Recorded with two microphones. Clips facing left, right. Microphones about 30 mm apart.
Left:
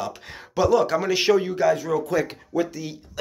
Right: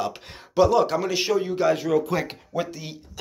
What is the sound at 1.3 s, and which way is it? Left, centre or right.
Speech, left.